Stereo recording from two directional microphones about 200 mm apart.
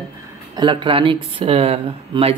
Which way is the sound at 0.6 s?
25° right (ahead or behind).